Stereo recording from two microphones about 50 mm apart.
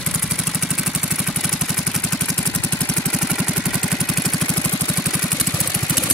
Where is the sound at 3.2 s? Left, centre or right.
Centre.